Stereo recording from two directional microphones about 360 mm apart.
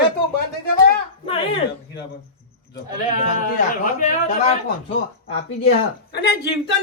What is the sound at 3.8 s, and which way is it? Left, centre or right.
Speech, centre.